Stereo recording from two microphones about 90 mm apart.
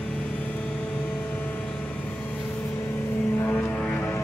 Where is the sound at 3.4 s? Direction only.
20° left (ahead or behind).